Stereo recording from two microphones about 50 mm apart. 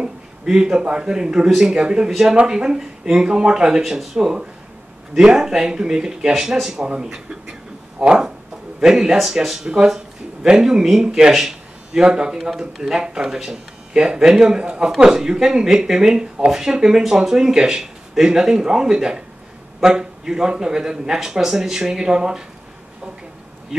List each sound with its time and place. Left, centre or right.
0.0 s speech: centre